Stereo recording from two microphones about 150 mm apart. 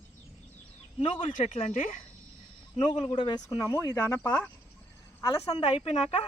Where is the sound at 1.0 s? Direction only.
35° left (ahead or behind).